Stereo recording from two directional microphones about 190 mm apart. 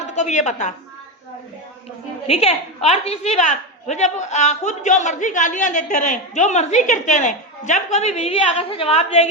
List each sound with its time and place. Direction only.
0.1 s a woman's voice: 40° left (ahead or behind)
2.2 s a woman's voice: 30° left (ahead or behind)